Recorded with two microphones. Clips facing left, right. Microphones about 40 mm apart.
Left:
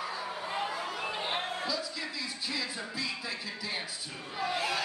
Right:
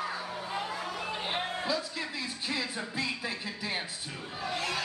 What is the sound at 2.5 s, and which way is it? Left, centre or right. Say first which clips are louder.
Music: right 4 dB; right.